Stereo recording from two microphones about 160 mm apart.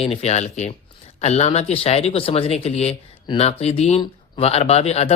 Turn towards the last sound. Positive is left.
turn(degrees=40)  # may be behind; listen again after turning